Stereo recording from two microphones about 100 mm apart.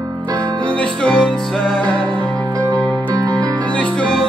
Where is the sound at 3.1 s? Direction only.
40° right (ahead or behind).